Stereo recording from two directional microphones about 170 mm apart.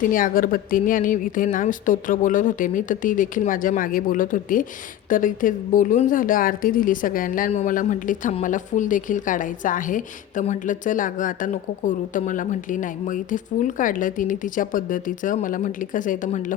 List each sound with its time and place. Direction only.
0.1 s speech: 55° left (ahead or behind)